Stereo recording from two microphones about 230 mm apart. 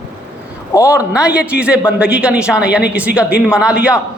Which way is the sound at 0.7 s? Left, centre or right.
Centre.